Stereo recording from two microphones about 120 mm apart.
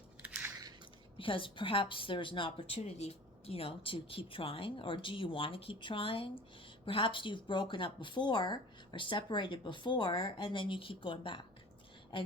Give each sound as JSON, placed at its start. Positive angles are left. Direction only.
{"t": 0.2, "sound": "biting", "side_deg": -15}
{"t": 1.2, "sound": "a woman's voice", "side_deg": 45}